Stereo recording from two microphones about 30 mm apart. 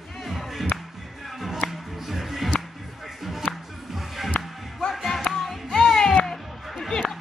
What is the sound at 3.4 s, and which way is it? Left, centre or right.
Music, left.